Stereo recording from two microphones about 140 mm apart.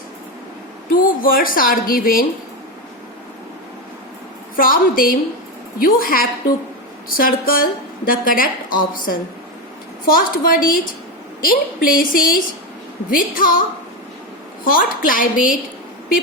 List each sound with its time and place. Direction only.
0.9 s a woman's voice: 90° left
4.5 s a woman's voice: 90° left
10.1 s a woman's voice: 90° left